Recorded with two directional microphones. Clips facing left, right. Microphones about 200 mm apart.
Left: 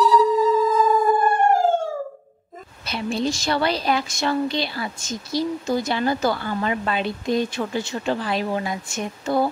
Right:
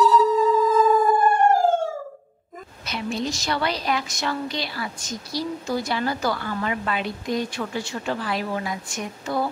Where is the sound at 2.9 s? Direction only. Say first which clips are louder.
Left 3 dB; 30° left (ahead or behind).